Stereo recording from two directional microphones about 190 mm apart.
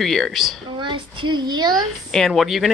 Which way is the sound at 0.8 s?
25° right (ahead or behind).